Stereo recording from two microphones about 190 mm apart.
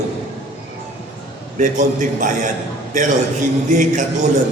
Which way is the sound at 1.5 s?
40° right (ahead or behind).